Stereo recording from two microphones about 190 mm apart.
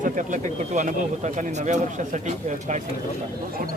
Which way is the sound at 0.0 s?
45° right (ahead or behind).